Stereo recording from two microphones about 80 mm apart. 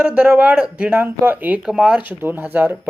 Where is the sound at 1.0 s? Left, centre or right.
Right.